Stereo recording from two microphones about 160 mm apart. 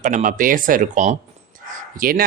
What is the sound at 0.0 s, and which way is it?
Speech, 55° right (ahead or behind).